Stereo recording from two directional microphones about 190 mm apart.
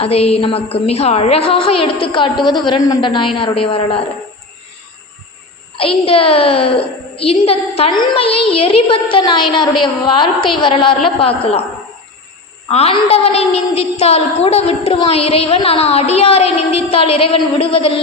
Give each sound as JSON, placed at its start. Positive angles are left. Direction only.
{"t": 0.0, "sound": "a child's voice", "side_deg": 30}
{"t": 5.7, "sound": "a child's voice", "side_deg": 30}
{"t": 12.6, "sound": "a woman's voice", "side_deg": 30}